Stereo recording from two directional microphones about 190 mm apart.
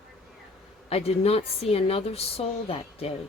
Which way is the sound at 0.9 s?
30° left (ahead or behind).